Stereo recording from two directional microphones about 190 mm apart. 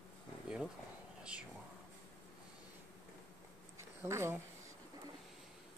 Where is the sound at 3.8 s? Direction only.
15° right (ahead or behind).